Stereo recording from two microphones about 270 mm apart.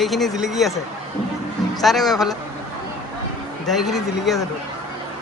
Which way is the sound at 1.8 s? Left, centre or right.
Centre.